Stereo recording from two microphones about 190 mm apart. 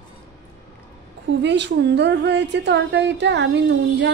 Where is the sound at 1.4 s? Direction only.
65° right (ahead or behind).